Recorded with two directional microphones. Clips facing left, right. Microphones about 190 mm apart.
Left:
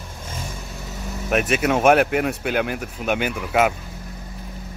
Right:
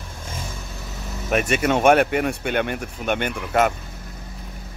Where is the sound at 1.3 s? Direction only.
Centre (ahead or behind).